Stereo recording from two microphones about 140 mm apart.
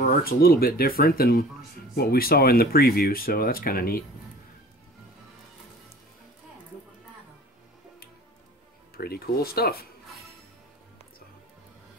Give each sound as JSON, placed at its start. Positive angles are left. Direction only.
{"t": 0.2, "sound": "speech", "side_deg": 90}
{"t": 8.9, "sound": "speech", "side_deg": 90}